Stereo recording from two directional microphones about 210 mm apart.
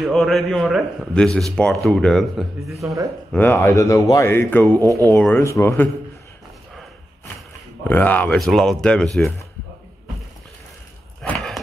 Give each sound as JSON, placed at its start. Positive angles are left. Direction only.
{"t": 0.1, "sound": "a man's voice", "side_deg": 0}
{"t": 2.7, "sound": "speech", "side_deg": -15}
{"t": 3.3, "sound": "speech", "side_deg": 10}
{"t": 4.8, "sound": "speech", "side_deg": -15}
{"t": 5.1, "sound": "speech", "side_deg": 10}
{"t": 7.9, "sound": "a man's voice", "side_deg": 10}
{"t": 11.2, "sound": "horse", "side_deg": 5}